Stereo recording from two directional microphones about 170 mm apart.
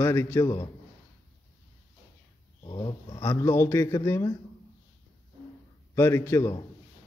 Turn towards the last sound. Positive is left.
turn(degrees=15)  # may be behind; listen again after turning